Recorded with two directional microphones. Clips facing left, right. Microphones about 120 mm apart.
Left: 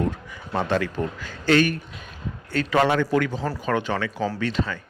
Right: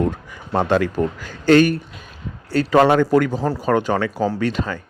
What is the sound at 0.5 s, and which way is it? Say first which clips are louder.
A man's voice: right 6 dB; 50° right (ahead or behind).